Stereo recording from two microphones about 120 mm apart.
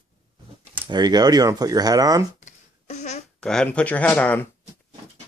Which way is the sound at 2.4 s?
75° left (ahead or behind).